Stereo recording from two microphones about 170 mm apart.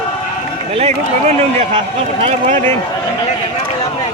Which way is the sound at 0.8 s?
35° right (ahead or behind).